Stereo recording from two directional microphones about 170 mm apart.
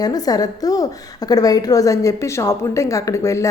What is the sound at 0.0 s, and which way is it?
A woman's voice, 20° left (ahead or behind).